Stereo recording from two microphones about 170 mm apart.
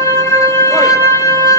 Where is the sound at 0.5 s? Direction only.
20° left (ahead or behind).